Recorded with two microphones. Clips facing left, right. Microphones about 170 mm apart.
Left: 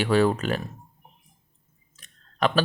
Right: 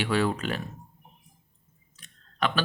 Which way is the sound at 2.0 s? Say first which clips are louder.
Left 4 dB; 40° left (ahead or behind).